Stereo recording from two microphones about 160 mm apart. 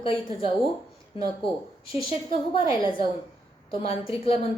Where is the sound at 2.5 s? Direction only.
30° left (ahead or behind).